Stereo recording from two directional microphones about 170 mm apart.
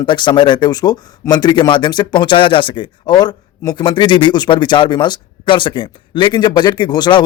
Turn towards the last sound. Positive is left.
turn(degrees=25)  # may be behind; listen again after turning